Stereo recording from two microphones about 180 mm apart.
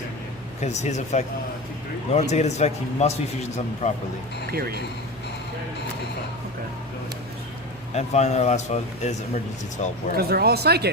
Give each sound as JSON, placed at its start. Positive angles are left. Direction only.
{"t": 0.6, "sound": "a man's voice", "side_deg": 40}
{"t": 2.3, "sound": "a man's voice", "side_deg": 40}
{"t": 4.5, "sound": "speech", "side_deg": -60}
{"t": 7.9, "sound": "a man's voice", "side_deg": 40}
{"t": 10.2, "sound": "speech", "side_deg": -60}